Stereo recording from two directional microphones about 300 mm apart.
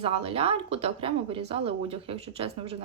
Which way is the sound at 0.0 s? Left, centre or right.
Centre.